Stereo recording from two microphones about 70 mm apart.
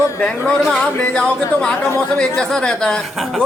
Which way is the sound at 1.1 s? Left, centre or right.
Centre.